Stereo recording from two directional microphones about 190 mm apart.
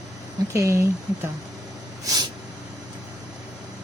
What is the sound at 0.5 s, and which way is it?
Speech, 15° right (ahead or behind).